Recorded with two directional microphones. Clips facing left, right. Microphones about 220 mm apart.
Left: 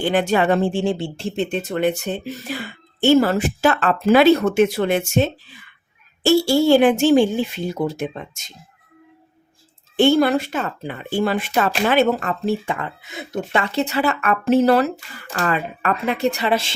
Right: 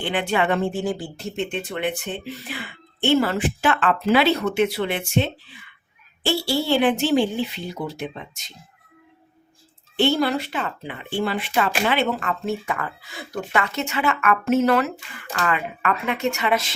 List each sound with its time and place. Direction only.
0.0 s speech: 40° left (ahead or behind)
10.0 s speech: 50° left (ahead or behind); by 16.7 s 30° left (ahead or behind)